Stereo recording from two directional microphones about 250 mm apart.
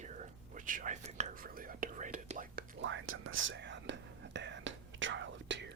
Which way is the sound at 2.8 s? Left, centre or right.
Right.